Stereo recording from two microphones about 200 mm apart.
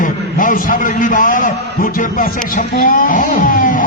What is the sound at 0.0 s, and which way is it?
A man's voice, 40° left (ahead or behind).